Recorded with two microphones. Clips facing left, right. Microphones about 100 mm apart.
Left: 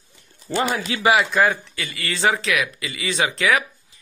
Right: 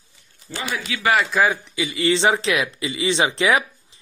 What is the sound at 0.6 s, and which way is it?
Speech, 45° left (ahead or behind).